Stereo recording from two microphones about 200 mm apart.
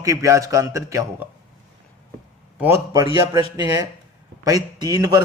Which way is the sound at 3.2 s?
20° right (ahead or behind).